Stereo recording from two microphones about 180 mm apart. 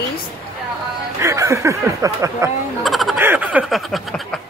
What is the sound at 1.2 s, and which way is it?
Snicker, 15° right (ahead or behind).